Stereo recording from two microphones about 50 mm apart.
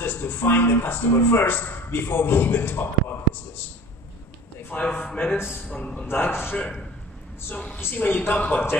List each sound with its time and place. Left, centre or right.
0.0 s a sound: left
1.1 s a man's voice: left
4.7 s a sound: left
5.0 s a woman's voice: left
6.0 s a man's voice: left
7.5 s a woman's voice: left
7.8 s a woman's voice: left
8.4 s a woman's voice: left